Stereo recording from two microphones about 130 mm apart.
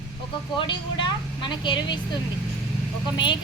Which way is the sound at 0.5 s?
40° left (ahead or behind).